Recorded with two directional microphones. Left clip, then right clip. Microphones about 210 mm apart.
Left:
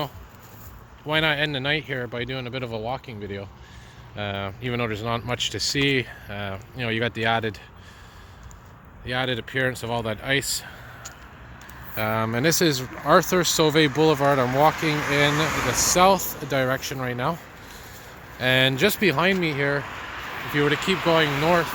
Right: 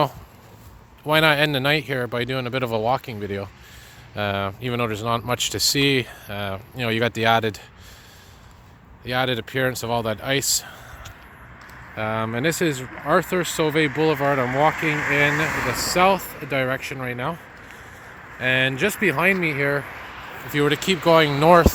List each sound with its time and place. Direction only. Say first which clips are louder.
1.0 s speech: right 5 dB; 30° right (ahead or behind)
9.0 s speech: right 3 dB; 30° right (ahead or behind)
11.9 s speech: even; centre (ahead or behind)
14.2 s speech: even; centre (ahead or behind)
15.3 s speech: right 1 dB; 25° right (ahead or behind)
16.0 s speech: right 1 dB; centre (ahead or behind)
20.0 s a sound: left 2 dB; 55° left (ahead or behind)
20.5 s speech: right 2 dB; 20° right (ahead or behind)